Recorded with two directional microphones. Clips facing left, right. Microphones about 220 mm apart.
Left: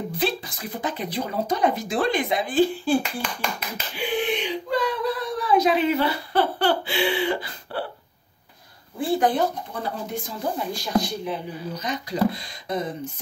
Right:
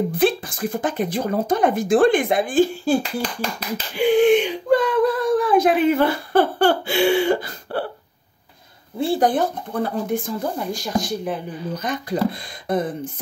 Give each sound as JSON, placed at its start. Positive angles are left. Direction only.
{"t": 0.2, "sound": "speech", "side_deg": -50}
{"t": 3.9, "sound": "speech", "side_deg": -45}
{"t": 9.2, "sound": "speech", "side_deg": -50}